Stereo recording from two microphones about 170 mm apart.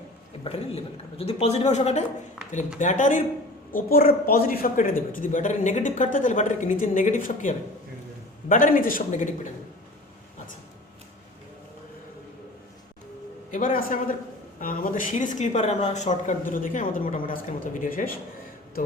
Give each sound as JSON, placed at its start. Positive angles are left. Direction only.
{"t": 0.4, "sound": "speech", "side_deg": 35}
{"t": 13.5, "sound": "speech", "side_deg": 50}